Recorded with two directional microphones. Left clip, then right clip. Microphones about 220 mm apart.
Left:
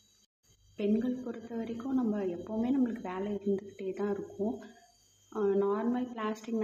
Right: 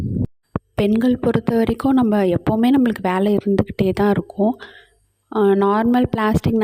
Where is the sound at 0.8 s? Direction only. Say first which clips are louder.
Right 15 dB; 50° right (ahead or behind).